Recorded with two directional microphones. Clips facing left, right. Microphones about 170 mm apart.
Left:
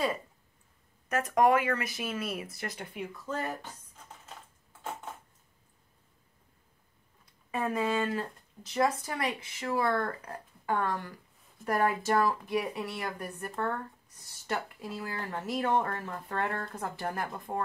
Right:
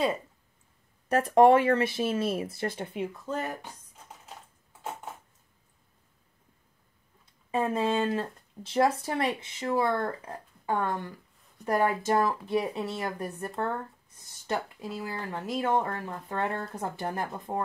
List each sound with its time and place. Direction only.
1.0 s speech: 30° right (ahead or behind)
7.5 s speech: 25° right (ahead or behind)